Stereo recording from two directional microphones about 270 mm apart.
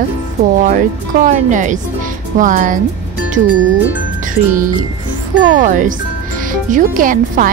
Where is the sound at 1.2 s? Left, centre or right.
Right.